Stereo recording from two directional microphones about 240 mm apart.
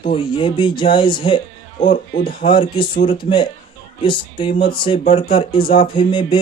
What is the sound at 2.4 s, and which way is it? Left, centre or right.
Speech, left.